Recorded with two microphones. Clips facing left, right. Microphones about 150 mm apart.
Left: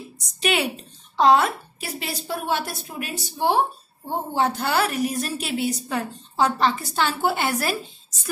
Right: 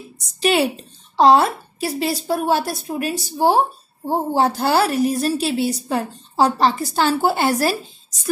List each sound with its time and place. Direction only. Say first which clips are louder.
0.4 s a woman's voice: right 6 dB; 35° right (ahead or behind)